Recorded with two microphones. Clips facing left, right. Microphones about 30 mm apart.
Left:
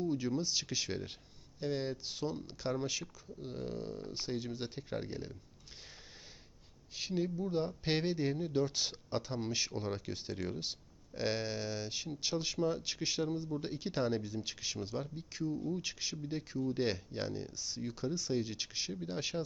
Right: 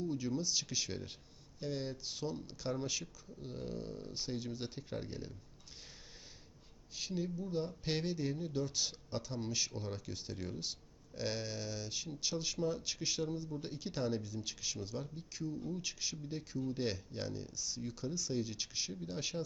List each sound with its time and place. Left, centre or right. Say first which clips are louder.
0.0 s speech: left 3 dB; centre
6.9 s speech: left 4 dB; centre